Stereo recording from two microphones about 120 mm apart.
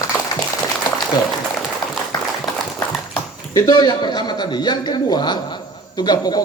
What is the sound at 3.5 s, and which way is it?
A man's voice, 35° left (ahead or behind).